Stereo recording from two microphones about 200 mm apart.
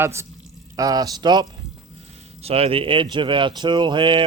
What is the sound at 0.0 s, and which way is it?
Speech, 15° right (ahead or behind).